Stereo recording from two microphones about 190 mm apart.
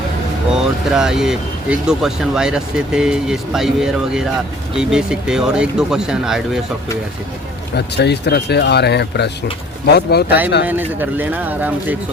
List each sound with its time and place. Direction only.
0.5 s speech: 5° right (ahead or behind)
7.8 s speech: 60° left (ahead or behind)
10.6 s speech: 10° right (ahead or behind)